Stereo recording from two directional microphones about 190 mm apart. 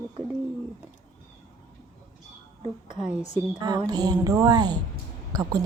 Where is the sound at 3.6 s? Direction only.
25° right (ahead or behind).